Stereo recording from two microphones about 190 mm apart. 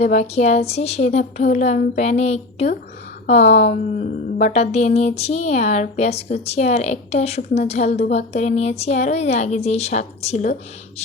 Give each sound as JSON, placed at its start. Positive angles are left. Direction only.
{"t": 0.0, "sound": "a woman's voice", "side_deg": 35}